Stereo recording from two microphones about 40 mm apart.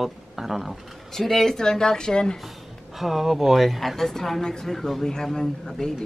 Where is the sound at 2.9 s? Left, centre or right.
Centre.